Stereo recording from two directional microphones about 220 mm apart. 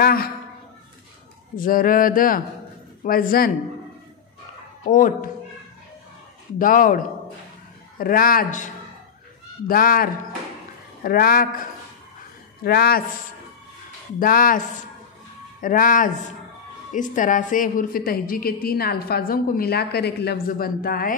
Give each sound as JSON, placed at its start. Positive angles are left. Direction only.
{"t": 0.0, "sound": "a man's voice", "side_deg": 40}
{"t": 1.6, "sound": "a woman's voice", "side_deg": 40}
{"t": 4.8, "sound": "a woman's voice", "side_deg": 40}
{"t": 6.6, "sound": "a woman's voice", "side_deg": 40}
{"t": 9.7, "sound": "a woman's voice", "side_deg": 40}
{"t": 12.6, "sound": "a man's voice", "side_deg": 45}
{"t": 14.2, "sound": "a woman's voice", "side_deg": 40}
{"t": 15.6, "sound": "a woman's voice", "side_deg": 40}